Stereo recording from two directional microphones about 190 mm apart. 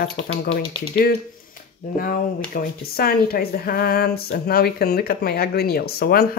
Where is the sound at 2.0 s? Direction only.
50° left (ahead or behind).